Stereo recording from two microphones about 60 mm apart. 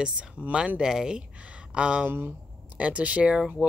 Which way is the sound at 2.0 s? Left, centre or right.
Right.